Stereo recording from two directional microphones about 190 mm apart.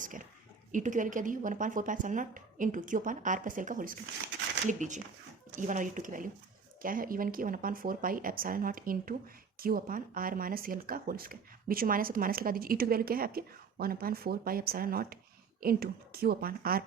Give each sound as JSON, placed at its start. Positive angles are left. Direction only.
{"t": 0.0, "sound": "speech", "side_deg": -45}